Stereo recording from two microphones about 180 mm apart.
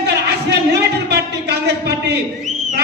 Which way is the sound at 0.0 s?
65° right (ahead or behind).